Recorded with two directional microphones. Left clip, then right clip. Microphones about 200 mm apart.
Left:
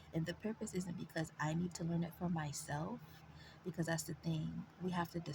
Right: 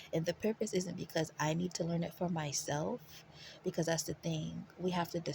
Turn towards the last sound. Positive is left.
turn(degrees=-30)  # may be behind; listen again after turning